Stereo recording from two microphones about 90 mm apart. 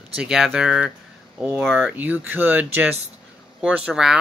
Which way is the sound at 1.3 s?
20° right (ahead or behind).